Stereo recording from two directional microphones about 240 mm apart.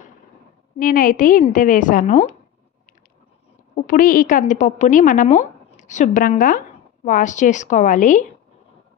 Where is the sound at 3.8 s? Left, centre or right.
Left.